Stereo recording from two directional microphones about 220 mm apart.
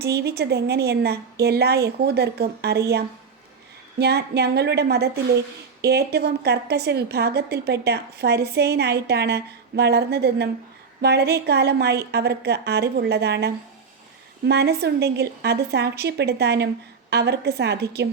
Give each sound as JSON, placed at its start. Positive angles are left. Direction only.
{"t": 0.0, "sound": "a woman's voice", "side_deg": -45}